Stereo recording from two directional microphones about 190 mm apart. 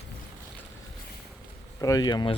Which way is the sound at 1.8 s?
20° left (ahead or behind).